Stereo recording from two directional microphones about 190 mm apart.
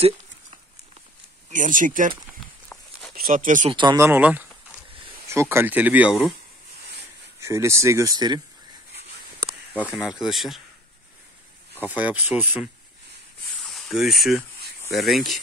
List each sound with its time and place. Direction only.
1.5 s speech: 45° right (ahead or behind)
3.3 s speech: 45° right (ahead or behind)
3.7 s speech: 20° right (ahead or behind); by 6.3 s 5° right (ahead or behind)
7.3 s speech: 15° right (ahead or behind)
9.8 s speech: centre (ahead or behind)
11.8 s speech: 10° right (ahead or behind)
13.7 s speech: centre (ahead or behind)